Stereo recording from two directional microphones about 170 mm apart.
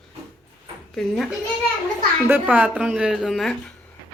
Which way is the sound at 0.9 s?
Centre (ahead or behind).